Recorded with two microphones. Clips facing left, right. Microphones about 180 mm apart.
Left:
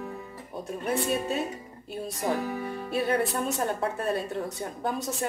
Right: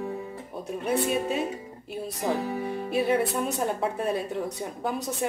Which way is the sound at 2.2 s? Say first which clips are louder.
Right 1 dB; 30° right (ahead or behind).